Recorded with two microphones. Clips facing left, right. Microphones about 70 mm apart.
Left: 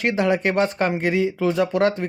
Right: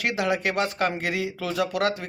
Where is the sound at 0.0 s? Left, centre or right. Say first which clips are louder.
Left 5 dB; left.